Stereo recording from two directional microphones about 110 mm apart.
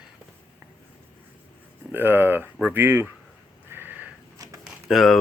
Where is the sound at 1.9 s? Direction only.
20° right (ahead or behind).